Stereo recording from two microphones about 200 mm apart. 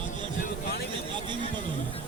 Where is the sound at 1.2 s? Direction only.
25° right (ahead or behind).